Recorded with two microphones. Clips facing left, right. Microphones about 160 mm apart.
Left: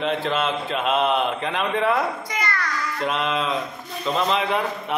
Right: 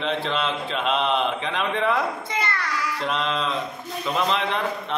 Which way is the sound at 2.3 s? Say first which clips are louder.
Even; 25° right (ahead or behind).